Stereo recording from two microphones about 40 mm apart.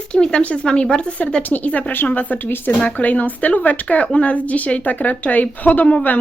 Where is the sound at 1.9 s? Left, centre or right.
Left.